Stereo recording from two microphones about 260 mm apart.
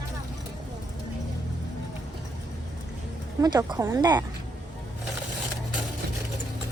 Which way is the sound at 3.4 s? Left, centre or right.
Centre.